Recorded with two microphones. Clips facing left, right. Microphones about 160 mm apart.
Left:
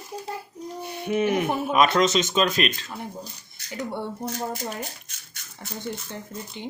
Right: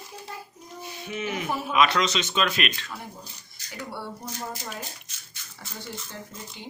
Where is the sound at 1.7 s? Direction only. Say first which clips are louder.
Left 3 dB; 45° left (ahead or behind).